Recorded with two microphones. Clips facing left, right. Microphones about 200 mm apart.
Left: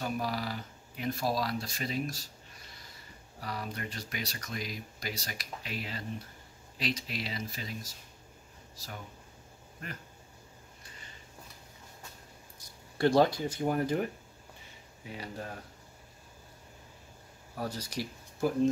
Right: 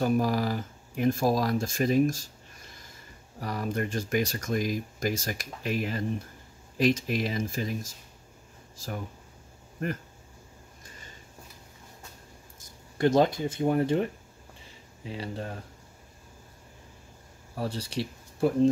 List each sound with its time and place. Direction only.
0.0 s a sound: 45° right (ahead or behind)
3.3 s speech: 45° right (ahead or behind)
12.9 s speech: 20° right (ahead or behind)
17.6 s speech: 30° right (ahead or behind)